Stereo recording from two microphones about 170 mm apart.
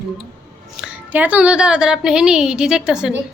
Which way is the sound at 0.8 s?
10° right (ahead or behind).